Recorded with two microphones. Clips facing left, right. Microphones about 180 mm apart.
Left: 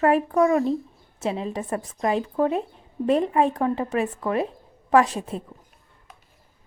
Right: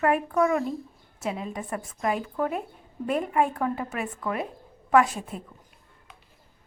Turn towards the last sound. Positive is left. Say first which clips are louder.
# left 2 dB
turn(degrees=30)  # may be behind; listen again after turning